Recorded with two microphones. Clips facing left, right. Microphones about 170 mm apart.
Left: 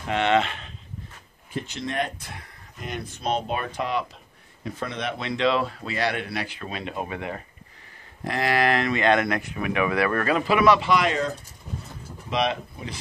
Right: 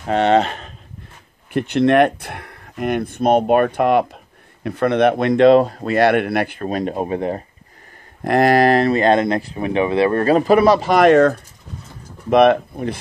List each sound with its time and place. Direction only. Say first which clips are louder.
0.1 s speech: right 7 dB; 40° right (ahead or behind)
1.5 s speech: right 16 dB; 65° right (ahead or behind); by 7.4 s 35° right (ahead or behind)
8.2 s speech: right 10 dB; 55° right (ahead or behind)